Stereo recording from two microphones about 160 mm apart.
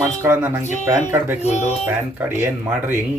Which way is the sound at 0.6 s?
45° left (ahead or behind).